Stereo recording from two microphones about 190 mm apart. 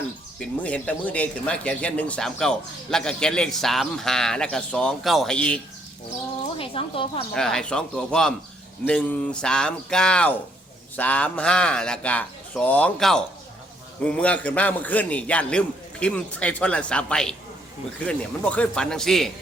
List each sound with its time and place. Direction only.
0.3 s speech: 5° left (ahead or behind)
6.6 s speech: 30° left (ahead or behind)
7.3 s a man's voice: 5° left (ahead or behind)